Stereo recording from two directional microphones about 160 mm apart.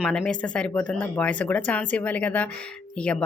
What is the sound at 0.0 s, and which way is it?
Speech, 5° left (ahead or behind).